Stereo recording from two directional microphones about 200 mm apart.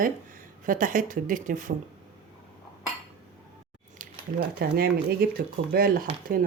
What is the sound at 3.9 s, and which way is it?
Speech, 45° right (ahead or behind).